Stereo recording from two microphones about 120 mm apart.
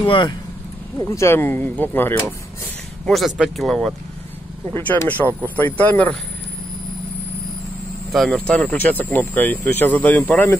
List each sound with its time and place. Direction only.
0.0 s speech: 40° left (ahead or behind)
0.9 s speech: 25° left (ahead or behind)
3.1 s speech: centre (ahead or behind)
4.7 s speech: 15° left (ahead or behind)
8.1 s speech: 5° left (ahead or behind)